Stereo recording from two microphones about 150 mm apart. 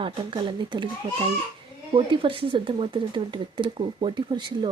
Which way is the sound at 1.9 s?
35° right (ahead or behind).